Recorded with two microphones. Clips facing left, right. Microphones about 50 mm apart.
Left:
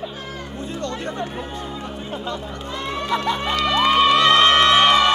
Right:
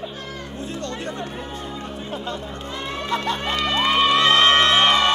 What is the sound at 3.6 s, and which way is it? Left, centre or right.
Cheering, centre.